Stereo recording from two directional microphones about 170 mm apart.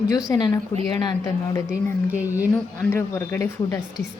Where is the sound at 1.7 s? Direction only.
10° right (ahead or behind).